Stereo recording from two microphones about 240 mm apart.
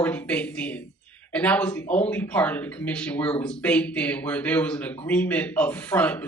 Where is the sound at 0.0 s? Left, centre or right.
Centre.